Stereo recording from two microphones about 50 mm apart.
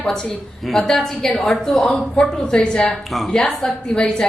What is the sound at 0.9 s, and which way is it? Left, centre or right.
A woman's voice, centre.